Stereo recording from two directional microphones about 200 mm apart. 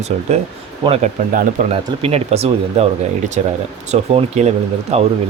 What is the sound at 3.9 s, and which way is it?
Speech, 30° right (ahead or behind).